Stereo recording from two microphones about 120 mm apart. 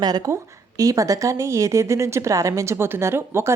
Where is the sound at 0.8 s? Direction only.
30° right (ahead or behind).